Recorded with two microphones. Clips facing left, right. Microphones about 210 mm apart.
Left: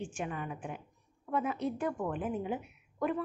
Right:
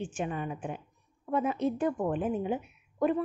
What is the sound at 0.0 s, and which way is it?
A woman's voice, 25° right (ahead or behind).